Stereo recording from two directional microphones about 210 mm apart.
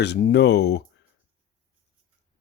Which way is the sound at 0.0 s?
55° left (ahead or behind).